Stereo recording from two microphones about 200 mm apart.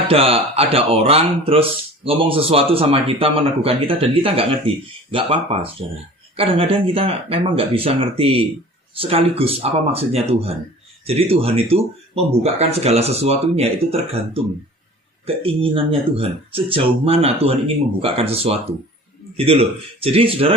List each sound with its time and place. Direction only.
0.1 s a man's voice: 30° right (ahead or behind)